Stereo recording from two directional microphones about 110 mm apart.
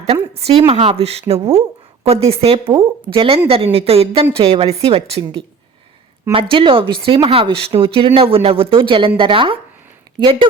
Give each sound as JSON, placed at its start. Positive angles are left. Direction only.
{"t": 0.0, "sound": "a woman's voice", "side_deg": -65}
{"t": 6.3, "sound": "speech", "side_deg": -55}